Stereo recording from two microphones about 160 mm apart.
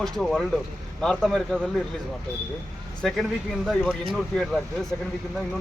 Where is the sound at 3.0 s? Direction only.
Centre (ahead or behind).